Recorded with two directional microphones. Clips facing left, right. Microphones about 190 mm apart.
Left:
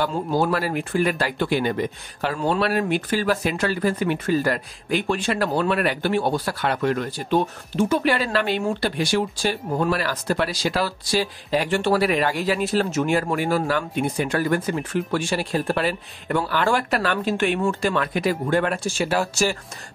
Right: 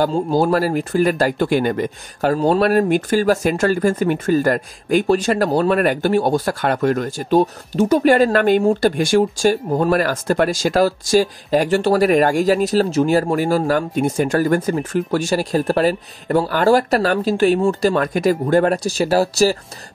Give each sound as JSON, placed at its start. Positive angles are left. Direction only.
{"t": 0.0, "sound": "speech", "side_deg": -35}